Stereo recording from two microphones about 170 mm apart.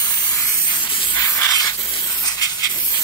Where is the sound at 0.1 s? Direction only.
10° left (ahead or behind).